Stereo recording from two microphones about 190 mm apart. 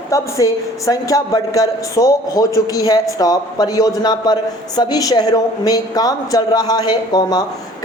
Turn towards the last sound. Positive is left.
turn(degrees=20)  # may be behind; listen again after turning